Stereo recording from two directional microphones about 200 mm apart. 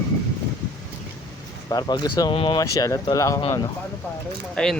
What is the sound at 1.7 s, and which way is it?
Speech, 20° left (ahead or behind).